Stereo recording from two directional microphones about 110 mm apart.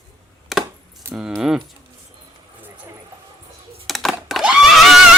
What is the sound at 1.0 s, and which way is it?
Keys jangling, 25° right (ahead or behind).